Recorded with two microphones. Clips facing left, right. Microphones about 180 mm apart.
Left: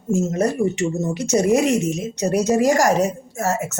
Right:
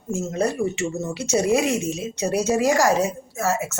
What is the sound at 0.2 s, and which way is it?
Speech, 45° left (ahead or behind).